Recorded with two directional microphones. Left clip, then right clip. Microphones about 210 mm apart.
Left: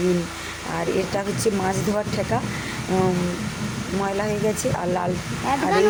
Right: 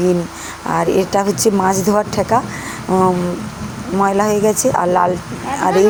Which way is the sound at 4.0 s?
15° right (ahead or behind).